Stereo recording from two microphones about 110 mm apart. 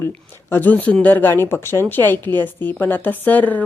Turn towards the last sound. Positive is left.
turn(degrees=15)  # may be behind; listen again after turning